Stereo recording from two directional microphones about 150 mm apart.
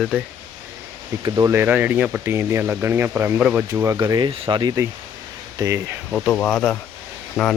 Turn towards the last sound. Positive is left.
turn(degrees=0)  # may be behind; listen again after turning